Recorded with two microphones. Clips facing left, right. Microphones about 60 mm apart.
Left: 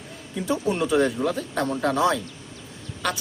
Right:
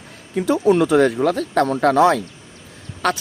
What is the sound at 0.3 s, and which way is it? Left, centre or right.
Speech, right.